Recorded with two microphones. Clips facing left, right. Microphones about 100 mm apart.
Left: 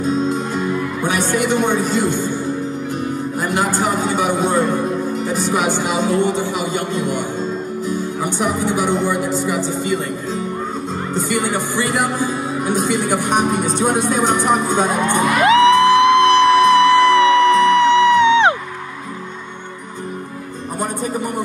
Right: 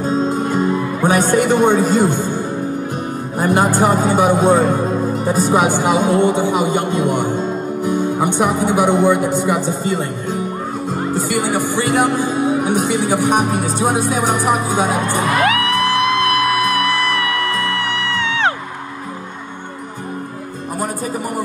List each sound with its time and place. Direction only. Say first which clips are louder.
1.0 s a man's voice: right 5 dB; 40° right (ahead or behind)
3.3 s a man's voice: right 6 dB; 45° right (ahead or behind)
6.5 s a man's voice: right 4 dB; 50° right (ahead or behind)
10.9 s music: right 3 dB; 10° right (ahead or behind)
12.8 s speech: right 2 dB; 15° right (ahead or behind)
15.4 s music: left 6 dB; 25° left (ahead or behind)